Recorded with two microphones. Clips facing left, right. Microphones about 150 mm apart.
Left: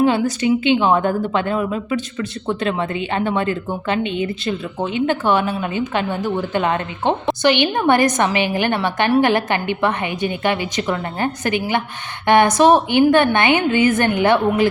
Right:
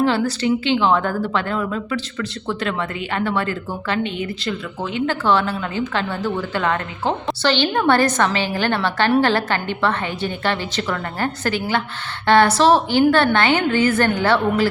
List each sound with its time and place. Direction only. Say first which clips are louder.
0.0 s a woman's voice: left 2 dB; 20° left (ahead or behind)